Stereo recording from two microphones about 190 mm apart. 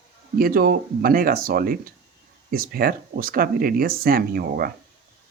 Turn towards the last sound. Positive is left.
turn(degrees=-50)  # may be behind; listen again after turning